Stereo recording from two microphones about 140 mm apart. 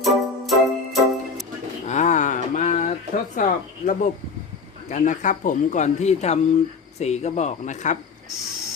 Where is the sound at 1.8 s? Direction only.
60° left (ahead or behind).